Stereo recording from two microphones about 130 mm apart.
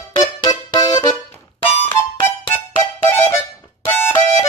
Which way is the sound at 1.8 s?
20° left (ahead or behind).